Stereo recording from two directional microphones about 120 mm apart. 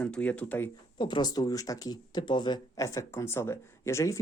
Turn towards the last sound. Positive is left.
turn(degrees=25)  # may be behind; listen again after turning